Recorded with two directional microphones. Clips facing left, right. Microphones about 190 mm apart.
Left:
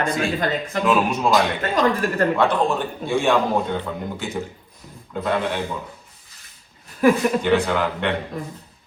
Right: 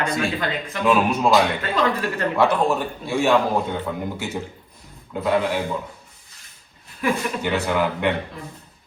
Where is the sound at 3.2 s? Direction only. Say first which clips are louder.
Right 2 dB; centre (ahead or behind).